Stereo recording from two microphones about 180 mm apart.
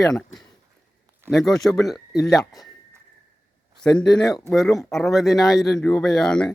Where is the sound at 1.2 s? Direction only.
Centre (ahead or behind).